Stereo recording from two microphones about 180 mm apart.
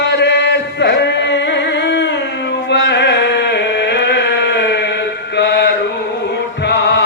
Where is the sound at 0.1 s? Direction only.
70° left (ahead or behind).